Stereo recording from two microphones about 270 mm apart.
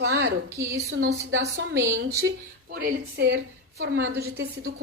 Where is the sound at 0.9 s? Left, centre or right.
Right.